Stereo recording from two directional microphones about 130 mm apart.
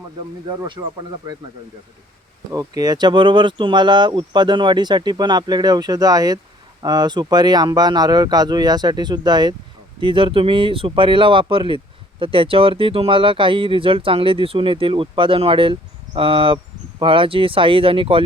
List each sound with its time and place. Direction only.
2.5 s speech: 30° right (ahead or behind)